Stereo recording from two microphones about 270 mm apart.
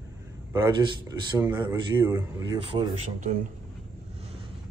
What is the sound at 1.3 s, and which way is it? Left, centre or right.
A man's voice, centre.